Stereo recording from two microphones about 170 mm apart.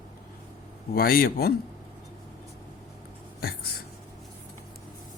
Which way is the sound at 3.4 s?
60° left (ahead or behind).